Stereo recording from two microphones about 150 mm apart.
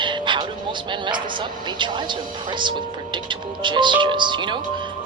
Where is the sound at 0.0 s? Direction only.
30° right (ahead or behind).